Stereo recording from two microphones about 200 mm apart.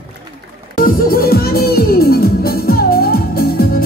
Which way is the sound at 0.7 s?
45° left (ahead or behind).